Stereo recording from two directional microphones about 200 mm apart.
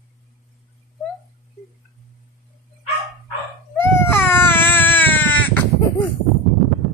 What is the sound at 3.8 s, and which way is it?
Baby cry, 10° left (ahead or behind).